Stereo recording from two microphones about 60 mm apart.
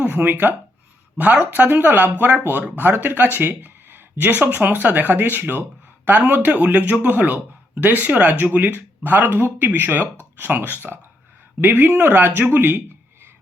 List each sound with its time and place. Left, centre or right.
0.0 s speech: right
2.9 s speech: right